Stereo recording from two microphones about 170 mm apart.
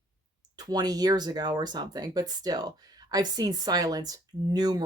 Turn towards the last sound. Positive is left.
turn(degrees=-25)  # may be behind; listen again after turning